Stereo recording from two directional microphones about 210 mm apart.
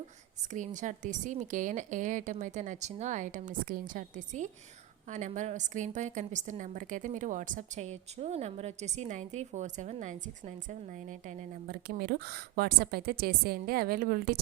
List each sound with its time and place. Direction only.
0.5 s a woman's voice: 35° right (ahead or behind)